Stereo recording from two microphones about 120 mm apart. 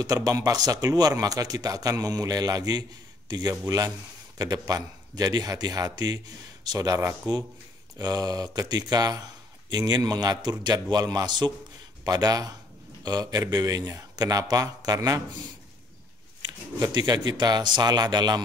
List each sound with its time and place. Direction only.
0.0 s speech: 30° right (ahead or behind)
16.4 s speech: 35° right (ahead or behind)